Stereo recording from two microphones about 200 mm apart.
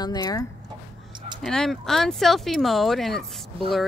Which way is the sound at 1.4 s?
Centre (ahead or behind).